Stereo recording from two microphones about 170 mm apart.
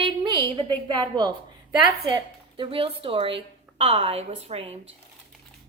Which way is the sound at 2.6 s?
35° right (ahead or behind).